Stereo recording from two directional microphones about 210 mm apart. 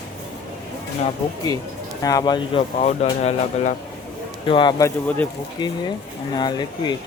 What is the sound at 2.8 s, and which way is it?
Speech, 30° left (ahead or behind).